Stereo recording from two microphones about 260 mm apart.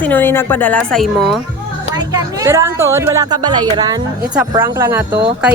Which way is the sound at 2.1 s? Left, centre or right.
Centre.